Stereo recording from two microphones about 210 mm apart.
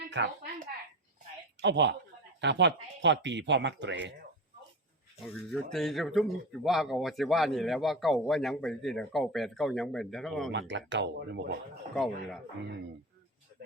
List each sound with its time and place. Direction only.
0.1 s speech: 60° right (ahead or behind)
1.6 s speech: 55° right (ahead or behind)
5.2 s speech: centre (ahead or behind)
10.5 s speech: 60° right (ahead or behind)
11.9 s speech: centre (ahead or behind)